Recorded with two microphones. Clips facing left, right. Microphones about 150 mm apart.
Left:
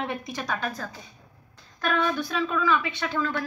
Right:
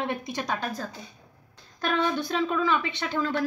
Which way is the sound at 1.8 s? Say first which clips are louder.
Even; 30° right (ahead or behind).